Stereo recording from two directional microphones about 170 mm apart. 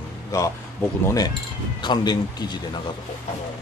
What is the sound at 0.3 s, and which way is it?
Speech, 20° left (ahead or behind).